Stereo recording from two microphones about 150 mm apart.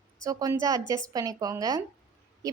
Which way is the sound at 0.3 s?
25° right (ahead or behind).